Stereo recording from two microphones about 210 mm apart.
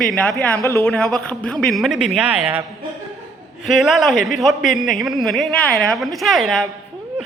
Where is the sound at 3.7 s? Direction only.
Centre (ahead or behind).